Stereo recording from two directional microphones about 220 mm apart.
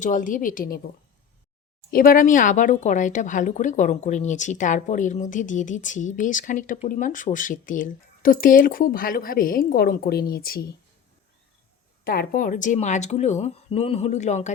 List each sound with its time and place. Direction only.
0.0 s speech: 35° left (ahead or behind)
1.9 s speech: 40° left (ahead or behind)
12.0 s speech: 40° left (ahead or behind)